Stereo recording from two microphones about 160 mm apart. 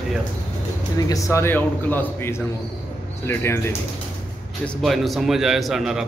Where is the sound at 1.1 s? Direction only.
20° left (ahead or behind).